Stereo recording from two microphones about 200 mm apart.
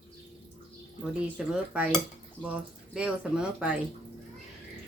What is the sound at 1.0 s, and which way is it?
Speech, 5° right (ahead or behind).